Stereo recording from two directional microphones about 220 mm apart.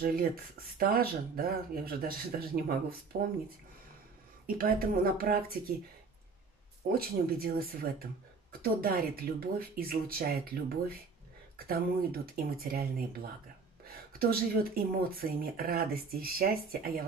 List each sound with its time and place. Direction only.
0.0 s speech: 40° right (ahead or behind)
4.5 s speech: 40° right (ahead or behind)
6.9 s speech: 45° right (ahead or behind)
13.8 s a sound: 45° right (ahead or behind)
15.1 s speech: 40° right (ahead or behind)